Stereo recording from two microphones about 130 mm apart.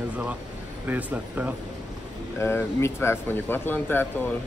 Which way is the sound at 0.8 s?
10° right (ahead or behind).